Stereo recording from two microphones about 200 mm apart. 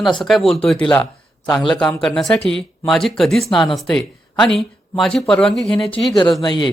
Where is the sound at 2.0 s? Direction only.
Centre (ahead or behind).